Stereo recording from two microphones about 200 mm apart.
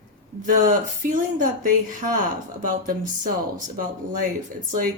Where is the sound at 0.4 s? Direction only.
40° right (ahead or behind).